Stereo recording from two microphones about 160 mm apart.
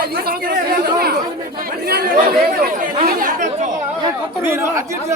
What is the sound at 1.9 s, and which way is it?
Speech, 75° right (ahead or behind).